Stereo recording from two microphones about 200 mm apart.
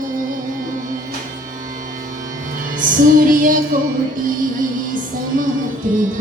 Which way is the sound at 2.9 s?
45° right (ahead or behind).